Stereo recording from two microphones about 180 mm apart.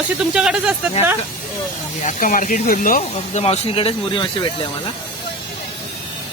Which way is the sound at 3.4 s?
30° left (ahead or behind).